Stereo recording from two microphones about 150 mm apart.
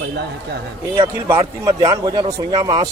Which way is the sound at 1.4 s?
25° right (ahead or behind).